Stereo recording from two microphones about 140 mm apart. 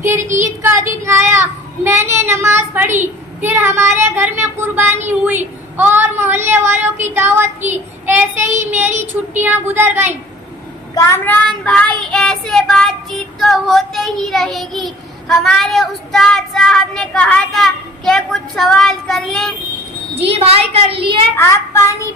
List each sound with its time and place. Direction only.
0.6 s speech: 20° right (ahead or behind)
11.0 s speech: 15° left (ahead or behind)
12.0 s child singing: 5° left (ahead or behind)
20.2 s a woman's voice: 45° right (ahead or behind)
21.4 s speech: 20° left (ahead or behind)